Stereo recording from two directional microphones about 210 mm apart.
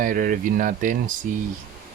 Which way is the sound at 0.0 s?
40° right (ahead or behind).